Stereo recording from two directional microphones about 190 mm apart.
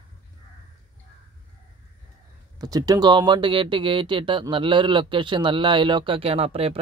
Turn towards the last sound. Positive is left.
turn(degrees=-30)  # may be behind; listen again after turning